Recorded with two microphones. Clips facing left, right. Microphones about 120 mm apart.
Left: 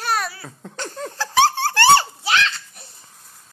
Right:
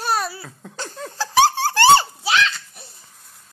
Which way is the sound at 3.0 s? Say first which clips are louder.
Left 1 dB; centre (ahead or behind).